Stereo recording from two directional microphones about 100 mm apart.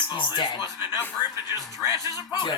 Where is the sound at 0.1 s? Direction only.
50° left (ahead or behind).